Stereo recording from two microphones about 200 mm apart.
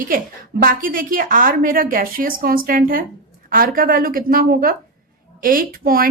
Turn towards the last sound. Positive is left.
turn(degrees=-45)  # may be behind; listen again after turning